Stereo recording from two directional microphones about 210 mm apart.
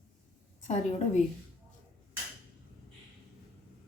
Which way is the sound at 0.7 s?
35° left (ahead or behind).